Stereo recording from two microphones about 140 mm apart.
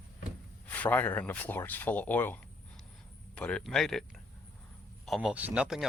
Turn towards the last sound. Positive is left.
turn(degrees=-5)  # may be behind; listen again after turning